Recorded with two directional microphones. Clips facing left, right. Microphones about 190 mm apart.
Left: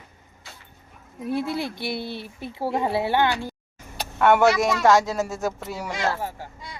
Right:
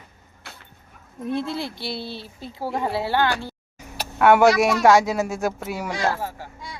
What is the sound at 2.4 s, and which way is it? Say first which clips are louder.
Speech: left 1 dB; 25° left (ahead or behind).